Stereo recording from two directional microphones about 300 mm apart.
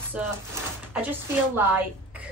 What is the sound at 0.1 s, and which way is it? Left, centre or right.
Speech, centre.